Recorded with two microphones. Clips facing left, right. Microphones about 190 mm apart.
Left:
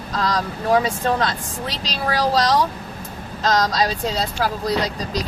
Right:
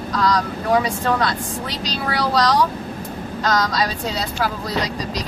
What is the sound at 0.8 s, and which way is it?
Speech, 25° left (ahead or behind).